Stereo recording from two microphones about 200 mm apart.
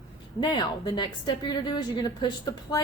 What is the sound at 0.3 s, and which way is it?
A woman's voice, 20° left (ahead or behind).